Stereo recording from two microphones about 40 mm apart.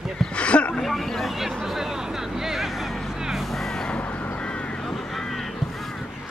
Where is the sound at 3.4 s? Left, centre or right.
Centre.